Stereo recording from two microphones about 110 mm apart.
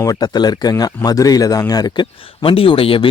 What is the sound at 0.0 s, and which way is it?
Speech, 35° left (ahead or behind).